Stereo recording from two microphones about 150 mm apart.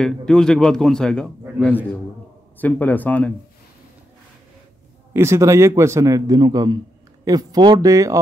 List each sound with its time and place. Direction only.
0.0 s speech: 5° left (ahead or behind)
5.1 s a man's voice: 15° right (ahead or behind)